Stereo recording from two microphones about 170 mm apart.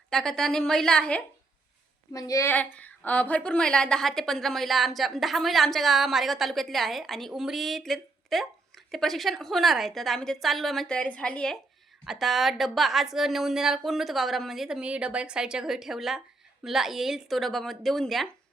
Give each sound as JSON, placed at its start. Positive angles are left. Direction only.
{"t": 0.1, "sound": "a woman's voice", "side_deg": 5}
{"t": 2.1, "sound": "a woman's voice", "side_deg": 20}